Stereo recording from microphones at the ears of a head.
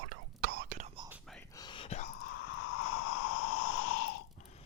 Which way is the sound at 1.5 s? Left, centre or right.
Left.